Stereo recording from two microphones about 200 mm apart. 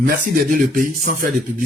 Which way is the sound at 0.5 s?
45° right (ahead or behind).